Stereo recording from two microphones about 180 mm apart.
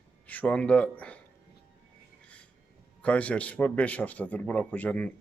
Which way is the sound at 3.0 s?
5° left (ahead or behind).